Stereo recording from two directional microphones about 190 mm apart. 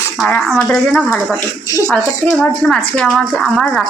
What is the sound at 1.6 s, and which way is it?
Speech, 20° left (ahead or behind).